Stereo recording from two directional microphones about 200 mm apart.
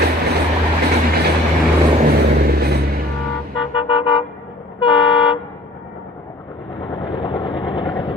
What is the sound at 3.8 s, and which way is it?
Toot, 25° left (ahead or behind).